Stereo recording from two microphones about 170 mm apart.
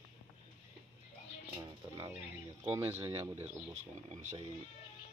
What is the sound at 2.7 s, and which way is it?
Speech, 15° right (ahead or behind).